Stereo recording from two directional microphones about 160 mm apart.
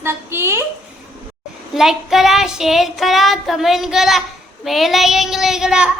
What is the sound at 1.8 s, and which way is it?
Speech, centre (ahead or behind).